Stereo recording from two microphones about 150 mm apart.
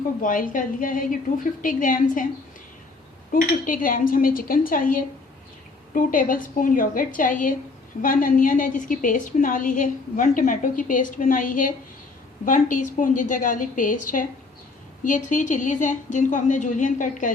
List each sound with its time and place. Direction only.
0.2 s a woman's voice: 65° left (ahead or behind)
3.3 s a woman's voice: 65° left (ahead or behind)